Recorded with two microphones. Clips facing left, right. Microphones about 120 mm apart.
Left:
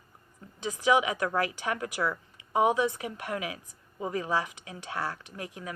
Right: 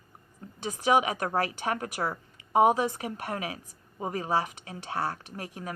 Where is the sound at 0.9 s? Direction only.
40° right (ahead or behind).